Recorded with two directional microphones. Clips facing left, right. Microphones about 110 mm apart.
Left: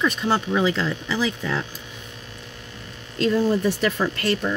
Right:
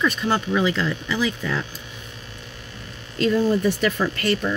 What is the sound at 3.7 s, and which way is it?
Speech, 30° left (ahead or behind).